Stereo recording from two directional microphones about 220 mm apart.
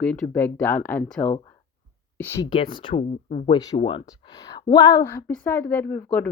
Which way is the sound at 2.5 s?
20° left (ahead or behind).